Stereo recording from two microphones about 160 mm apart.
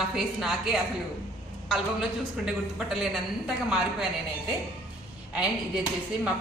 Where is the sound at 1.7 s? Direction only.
5° right (ahead or behind).